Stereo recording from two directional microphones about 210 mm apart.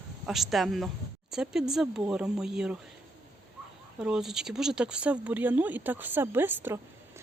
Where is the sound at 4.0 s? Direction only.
5° right (ahead or behind).